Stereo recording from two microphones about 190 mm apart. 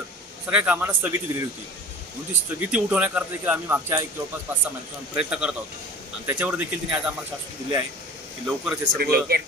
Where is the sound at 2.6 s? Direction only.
5° right (ahead or behind).